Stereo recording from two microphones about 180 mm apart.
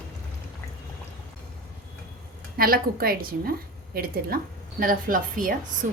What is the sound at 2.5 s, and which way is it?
A woman's voice, 55° right (ahead or behind).